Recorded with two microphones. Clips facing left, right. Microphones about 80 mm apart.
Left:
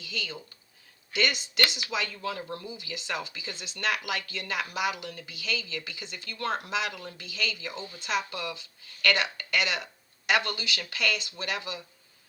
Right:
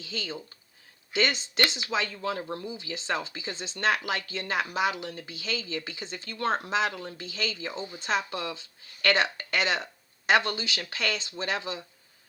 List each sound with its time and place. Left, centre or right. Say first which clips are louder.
0.0 s speech: right 1 dB; right